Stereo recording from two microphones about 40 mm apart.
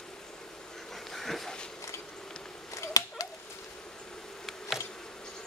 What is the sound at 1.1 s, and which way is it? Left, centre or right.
Dog, centre.